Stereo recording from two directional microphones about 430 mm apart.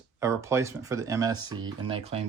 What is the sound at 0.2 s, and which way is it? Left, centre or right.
Speech, centre.